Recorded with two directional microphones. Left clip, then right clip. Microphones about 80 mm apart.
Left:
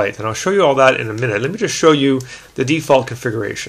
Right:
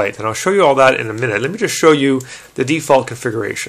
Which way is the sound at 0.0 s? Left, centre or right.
Right.